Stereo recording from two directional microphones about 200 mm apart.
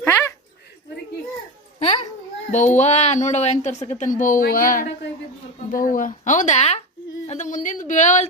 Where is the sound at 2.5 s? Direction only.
35° left (ahead or behind).